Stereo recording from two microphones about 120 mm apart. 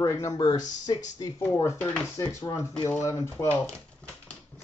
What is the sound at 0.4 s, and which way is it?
Speech, 40° left (ahead or behind).